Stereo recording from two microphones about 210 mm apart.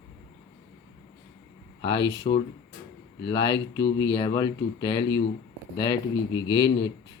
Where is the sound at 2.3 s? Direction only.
30° left (ahead or behind).